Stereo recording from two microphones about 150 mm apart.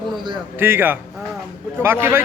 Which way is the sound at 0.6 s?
15° right (ahead or behind).